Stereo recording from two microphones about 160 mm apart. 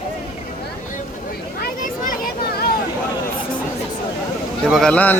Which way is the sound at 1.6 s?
60° left (ahead or behind).